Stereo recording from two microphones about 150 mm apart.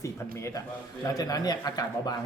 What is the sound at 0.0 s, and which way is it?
A man's voice, 20° left (ahead or behind).